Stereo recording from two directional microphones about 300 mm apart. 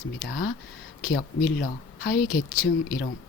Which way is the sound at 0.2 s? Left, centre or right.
Left.